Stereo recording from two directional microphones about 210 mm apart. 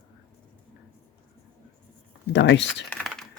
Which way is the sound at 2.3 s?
55° left (ahead or behind).